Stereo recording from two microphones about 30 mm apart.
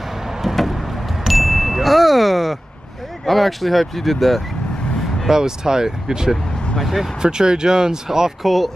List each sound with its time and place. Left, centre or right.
0.6 s chime: centre
3.3 s speech: centre
5.3 s speech: right
6.8 s speech: centre
7.2 s speech: right
8.4 s speech: centre